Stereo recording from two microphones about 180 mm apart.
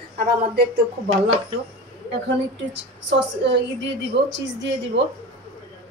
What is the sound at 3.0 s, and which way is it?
Speech, 75° right (ahead or behind).